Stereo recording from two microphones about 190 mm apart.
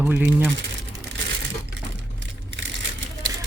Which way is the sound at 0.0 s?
5° right (ahead or behind).